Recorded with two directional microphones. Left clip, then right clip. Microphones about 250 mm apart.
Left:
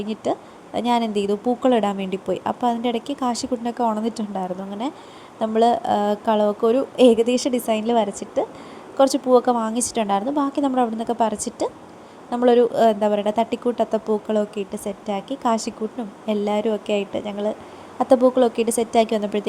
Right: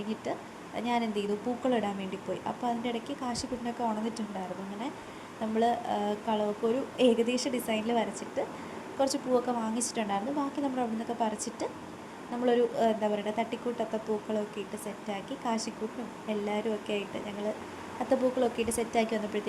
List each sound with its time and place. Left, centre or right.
0.2 s a woman's voice: left
5.4 s a woman's voice: left